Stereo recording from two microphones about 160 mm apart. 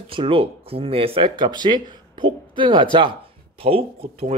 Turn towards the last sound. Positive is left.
turn(degrees=-35)  # may be behind; listen again after turning